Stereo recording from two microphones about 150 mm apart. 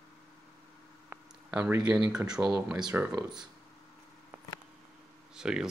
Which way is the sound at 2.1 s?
5° right (ahead or behind).